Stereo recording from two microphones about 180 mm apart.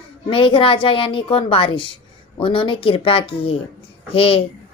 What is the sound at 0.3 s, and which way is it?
A woman's voice, 30° left (ahead or behind).